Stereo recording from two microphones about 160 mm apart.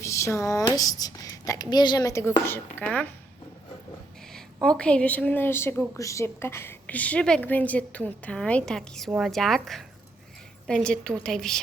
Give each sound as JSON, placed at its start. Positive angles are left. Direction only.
{"t": 0.0, "sound": "speech", "side_deg": 20}
{"t": 4.3, "sound": "a woman's voice", "side_deg": 5}